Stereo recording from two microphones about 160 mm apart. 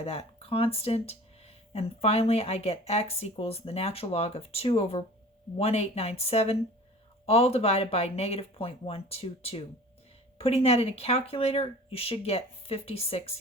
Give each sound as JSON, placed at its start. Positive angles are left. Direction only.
{"t": 0.0, "sound": "speech", "side_deg": 35}